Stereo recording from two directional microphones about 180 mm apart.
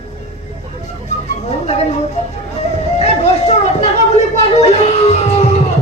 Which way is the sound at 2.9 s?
40° left (ahead or behind).